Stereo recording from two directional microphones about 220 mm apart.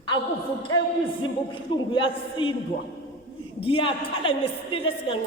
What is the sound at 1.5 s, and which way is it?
A man's voice, 20° left (ahead or behind).